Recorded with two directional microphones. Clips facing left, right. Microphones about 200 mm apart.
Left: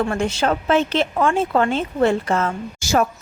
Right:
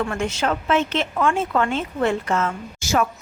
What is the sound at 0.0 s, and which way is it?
A woman's voice, 35° left (ahead or behind).